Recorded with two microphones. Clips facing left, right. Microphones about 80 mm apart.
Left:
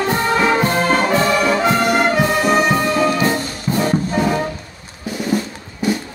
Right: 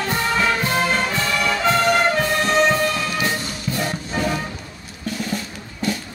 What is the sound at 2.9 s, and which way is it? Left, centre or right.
Music, left.